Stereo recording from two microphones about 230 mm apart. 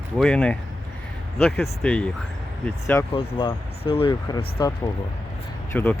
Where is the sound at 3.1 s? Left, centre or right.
Left.